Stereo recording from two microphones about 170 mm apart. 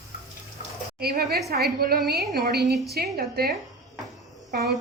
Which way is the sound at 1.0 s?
65° right (ahead or behind).